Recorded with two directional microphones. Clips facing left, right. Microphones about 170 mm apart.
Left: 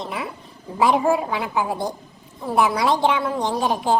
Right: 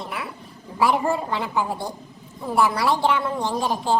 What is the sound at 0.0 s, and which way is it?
A woman's voice, 20° left (ahead or behind).